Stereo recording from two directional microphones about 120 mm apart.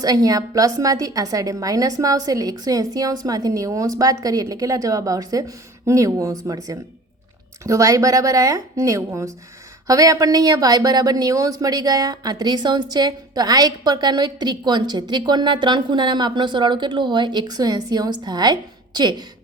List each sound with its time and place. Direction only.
0.0 s a woman's voice: 30° right (ahead or behind)